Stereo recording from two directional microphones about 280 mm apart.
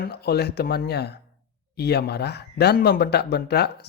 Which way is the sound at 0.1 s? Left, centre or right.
Left.